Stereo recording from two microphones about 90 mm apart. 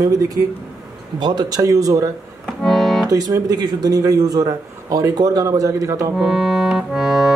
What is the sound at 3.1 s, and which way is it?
Speech, 40° right (ahead or behind).